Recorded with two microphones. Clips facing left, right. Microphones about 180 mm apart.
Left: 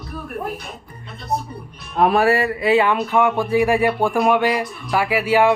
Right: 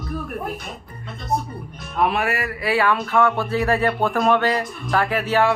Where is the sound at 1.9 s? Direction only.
35° left (ahead or behind).